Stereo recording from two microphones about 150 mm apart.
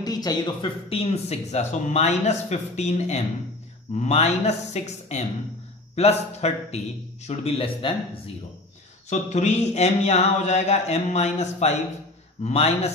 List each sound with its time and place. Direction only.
0.0 s speech: 25° left (ahead or behind)
9.1 s speech: 50° left (ahead or behind)